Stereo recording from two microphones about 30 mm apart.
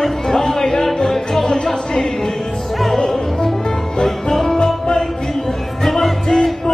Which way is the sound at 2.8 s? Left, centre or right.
Centre.